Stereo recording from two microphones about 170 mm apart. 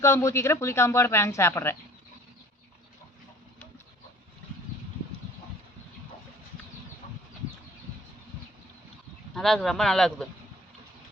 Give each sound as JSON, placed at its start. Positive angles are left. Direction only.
{"t": 0.0, "sound": "speech", "side_deg": 15}
{"t": 9.3, "sound": "speech", "side_deg": 5}